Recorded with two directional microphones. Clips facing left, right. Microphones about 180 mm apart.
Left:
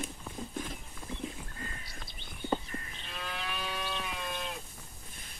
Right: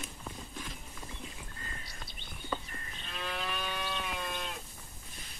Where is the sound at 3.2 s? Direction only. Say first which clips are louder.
Right 2 dB; centre (ahead or behind).